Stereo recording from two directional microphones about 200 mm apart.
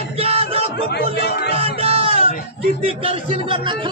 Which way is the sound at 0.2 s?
30° right (ahead or behind).